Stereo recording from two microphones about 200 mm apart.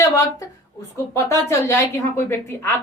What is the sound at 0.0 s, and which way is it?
A woman's voice, 15° left (ahead or behind).